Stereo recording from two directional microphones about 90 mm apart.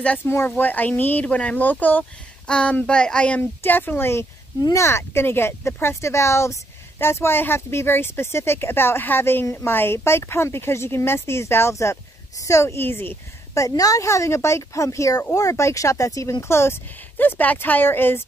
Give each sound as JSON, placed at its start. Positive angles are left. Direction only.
{"t": 0.0, "sound": "speech", "side_deg": 15}
{"t": 13.6, "sound": "speech", "side_deg": 40}